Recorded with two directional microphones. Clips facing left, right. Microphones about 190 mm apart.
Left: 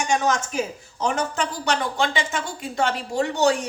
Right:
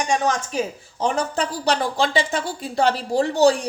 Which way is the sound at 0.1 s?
35° right (ahead or behind).